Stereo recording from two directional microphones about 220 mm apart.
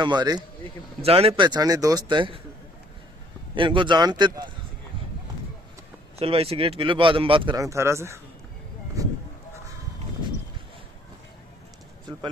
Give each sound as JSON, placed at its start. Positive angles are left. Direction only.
{"t": 0.0, "sound": "speech", "side_deg": -20}
{"t": 3.5, "sound": "speech", "side_deg": -20}
{"t": 6.1, "sound": "speech", "side_deg": -25}
{"t": 9.0, "sound": "a sound", "side_deg": -15}